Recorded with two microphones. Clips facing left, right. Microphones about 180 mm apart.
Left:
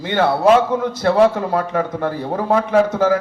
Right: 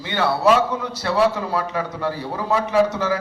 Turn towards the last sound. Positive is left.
turn(degrees=50)  # may be behind; listen again after turning